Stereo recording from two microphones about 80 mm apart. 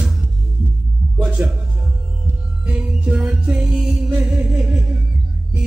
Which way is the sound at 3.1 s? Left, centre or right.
Centre.